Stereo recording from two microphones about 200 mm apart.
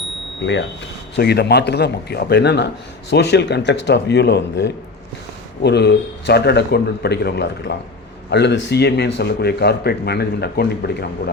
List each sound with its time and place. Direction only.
1.1 s a man's voice: 55° left (ahead or behind)